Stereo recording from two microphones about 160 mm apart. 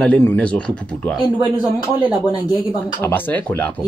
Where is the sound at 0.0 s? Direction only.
10° left (ahead or behind).